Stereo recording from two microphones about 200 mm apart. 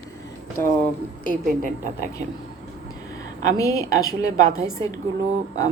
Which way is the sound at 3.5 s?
15° left (ahead or behind).